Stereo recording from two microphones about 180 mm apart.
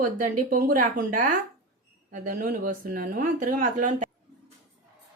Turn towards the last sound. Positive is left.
turn(degrees=-45)  # may be behind; listen again after turning